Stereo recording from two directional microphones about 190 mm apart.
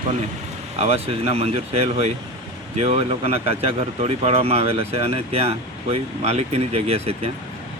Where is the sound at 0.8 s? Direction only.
35° right (ahead or behind).